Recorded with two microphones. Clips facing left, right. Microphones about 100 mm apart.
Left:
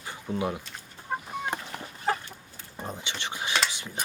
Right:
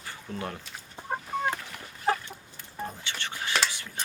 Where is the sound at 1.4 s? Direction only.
20° left (ahead or behind).